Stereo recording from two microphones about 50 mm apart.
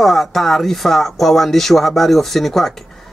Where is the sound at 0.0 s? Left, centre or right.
Centre.